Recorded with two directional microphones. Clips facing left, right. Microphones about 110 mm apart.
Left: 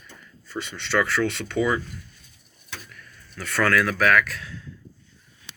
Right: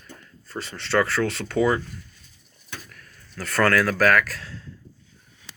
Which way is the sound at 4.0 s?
35° right (ahead or behind).